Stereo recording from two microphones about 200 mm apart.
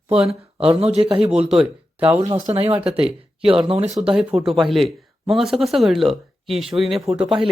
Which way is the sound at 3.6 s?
30° right (ahead or behind).